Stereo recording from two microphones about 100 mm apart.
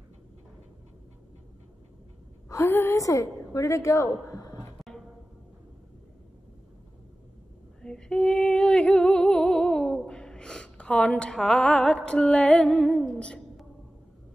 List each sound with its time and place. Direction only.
2.5 s a woman's voice: 25° left (ahead or behind)
4.7 s music: centre (ahead or behind)
7.8 s female singing: 5° left (ahead or behind)